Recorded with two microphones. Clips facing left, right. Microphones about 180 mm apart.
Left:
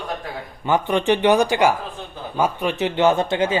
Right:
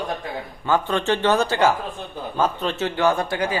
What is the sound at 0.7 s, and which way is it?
A man's voice, 15° left (ahead or behind).